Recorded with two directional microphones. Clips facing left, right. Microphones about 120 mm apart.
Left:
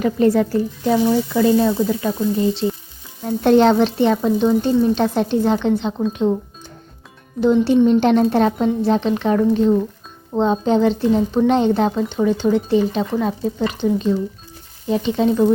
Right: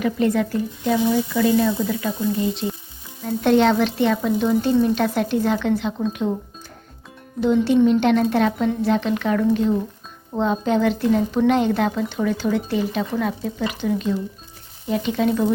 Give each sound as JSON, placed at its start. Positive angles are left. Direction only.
{"t": 0.0, "sound": "a woman's voice", "side_deg": 35}
{"t": 7.4, "sound": "a woman's voice", "side_deg": 35}